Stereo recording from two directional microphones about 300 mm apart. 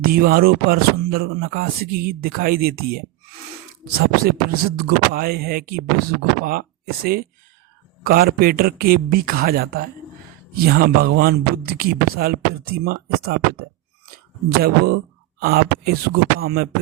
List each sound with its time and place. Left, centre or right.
0.0 s speech: right